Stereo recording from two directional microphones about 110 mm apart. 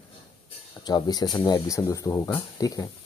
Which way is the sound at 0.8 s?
40° left (ahead or behind).